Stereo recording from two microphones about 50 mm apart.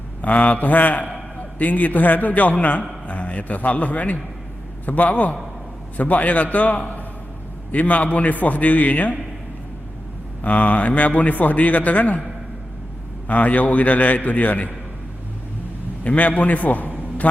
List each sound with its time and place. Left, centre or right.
0.2 s a man's voice: left
10.4 s a man's voice: left
13.2 s a man's voice: left
16.0 s a man's voice: left